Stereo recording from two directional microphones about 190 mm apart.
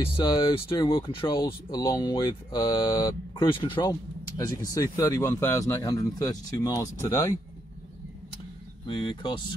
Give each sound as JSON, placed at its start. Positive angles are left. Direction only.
{"t": 0.3, "sound": "speech", "side_deg": 25}
{"t": 8.8, "sound": "speech", "side_deg": 25}